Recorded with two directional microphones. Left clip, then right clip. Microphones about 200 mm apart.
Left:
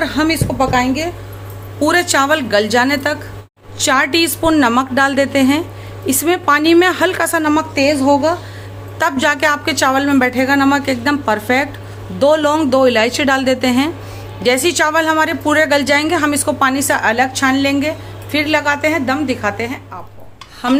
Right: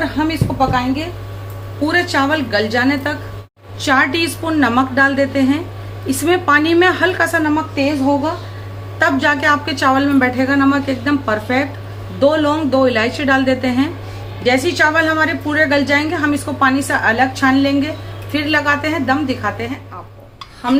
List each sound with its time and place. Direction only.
0.0 s a woman's voice: 55° left (ahead or behind); by 19.8 s 35° left (ahead or behind)